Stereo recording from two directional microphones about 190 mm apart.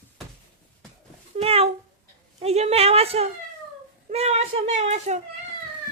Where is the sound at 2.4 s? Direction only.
35° right (ahead or behind).